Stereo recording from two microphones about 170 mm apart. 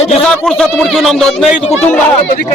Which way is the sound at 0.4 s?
5° left (ahead or behind).